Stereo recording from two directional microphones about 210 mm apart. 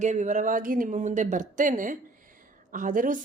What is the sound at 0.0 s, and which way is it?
A woman's voice, 35° right (ahead or behind).